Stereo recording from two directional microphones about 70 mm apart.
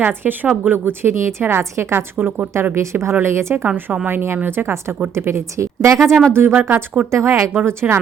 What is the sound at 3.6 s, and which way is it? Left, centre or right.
A woman's voice, right.